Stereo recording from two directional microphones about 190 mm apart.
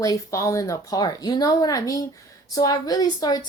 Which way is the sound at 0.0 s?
15° left (ahead or behind).